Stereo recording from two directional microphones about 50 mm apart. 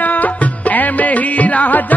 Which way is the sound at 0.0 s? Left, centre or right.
Left.